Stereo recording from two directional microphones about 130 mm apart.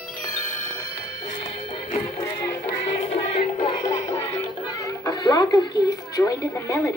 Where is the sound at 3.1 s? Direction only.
50° left (ahead or behind).